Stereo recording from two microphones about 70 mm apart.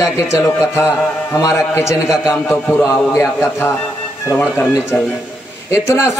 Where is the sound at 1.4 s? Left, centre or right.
Left.